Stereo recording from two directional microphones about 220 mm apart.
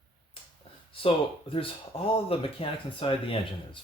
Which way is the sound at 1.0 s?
25° left (ahead or behind).